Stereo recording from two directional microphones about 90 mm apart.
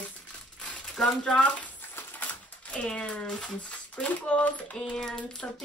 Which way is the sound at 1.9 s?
20° left (ahead or behind).